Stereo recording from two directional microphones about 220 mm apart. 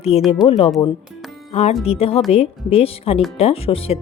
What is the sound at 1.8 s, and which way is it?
A woman's voice, 25° left (ahead or behind).